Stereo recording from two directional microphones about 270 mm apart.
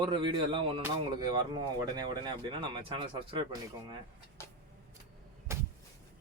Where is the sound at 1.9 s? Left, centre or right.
Centre.